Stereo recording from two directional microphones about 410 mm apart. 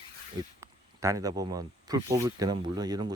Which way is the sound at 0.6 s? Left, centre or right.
Centre.